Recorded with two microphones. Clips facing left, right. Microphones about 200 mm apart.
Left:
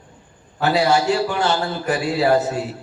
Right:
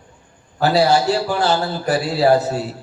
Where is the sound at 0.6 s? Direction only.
35° right (ahead or behind).